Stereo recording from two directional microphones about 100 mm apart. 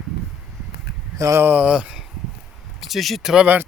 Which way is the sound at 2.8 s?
Centre (ahead or behind).